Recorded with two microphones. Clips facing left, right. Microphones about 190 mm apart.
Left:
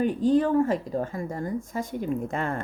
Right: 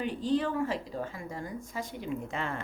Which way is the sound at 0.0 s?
45° left (ahead or behind).